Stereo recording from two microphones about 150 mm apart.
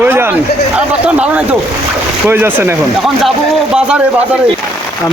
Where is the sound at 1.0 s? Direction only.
10° right (ahead or behind).